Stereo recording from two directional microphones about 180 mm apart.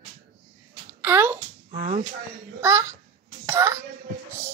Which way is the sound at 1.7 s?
45° right (ahead or behind).